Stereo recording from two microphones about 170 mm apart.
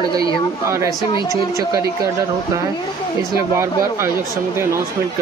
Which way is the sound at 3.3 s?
15° right (ahead or behind).